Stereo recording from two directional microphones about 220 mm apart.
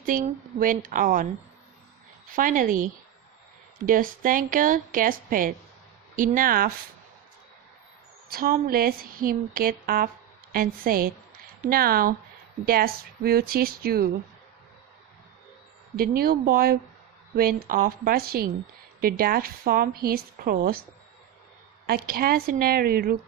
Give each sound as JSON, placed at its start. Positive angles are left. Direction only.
{"t": 0.0, "sound": "speech", "side_deg": -40}
{"t": 2.3, "sound": "speech", "side_deg": -40}
{"t": 8.3, "sound": "speech", "side_deg": -40}
{"t": 16.0, "sound": "speech", "side_deg": -45}
{"t": 21.8, "sound": "speech", "side_deg": -45}